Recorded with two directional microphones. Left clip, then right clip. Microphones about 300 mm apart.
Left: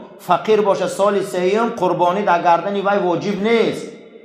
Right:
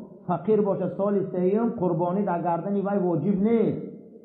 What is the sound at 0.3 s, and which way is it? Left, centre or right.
A man's voice, centre.